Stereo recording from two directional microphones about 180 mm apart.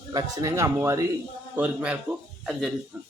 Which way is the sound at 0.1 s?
20° right (ahead or behind).